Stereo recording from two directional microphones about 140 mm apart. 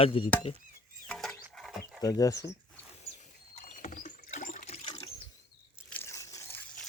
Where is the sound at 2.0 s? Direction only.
25° left (ahead or behind).